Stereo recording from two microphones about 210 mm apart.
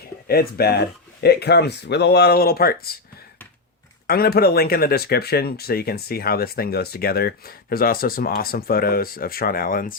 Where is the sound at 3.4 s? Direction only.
10° left (ahead or behind).